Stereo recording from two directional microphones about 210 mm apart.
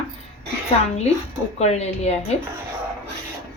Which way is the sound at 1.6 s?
30° left (ahead or behind).